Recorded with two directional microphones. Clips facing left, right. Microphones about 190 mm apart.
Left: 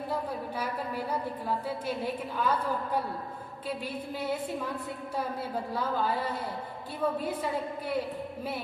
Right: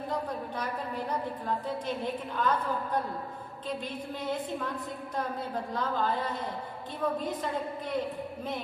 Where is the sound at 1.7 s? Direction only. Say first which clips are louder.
Even; 10° left (ahead or behind).